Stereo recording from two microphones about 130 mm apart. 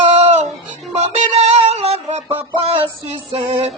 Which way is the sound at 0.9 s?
55° right (ahead or behind).